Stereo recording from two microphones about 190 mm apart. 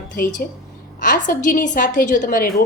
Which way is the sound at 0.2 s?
40° left (ahead or behind).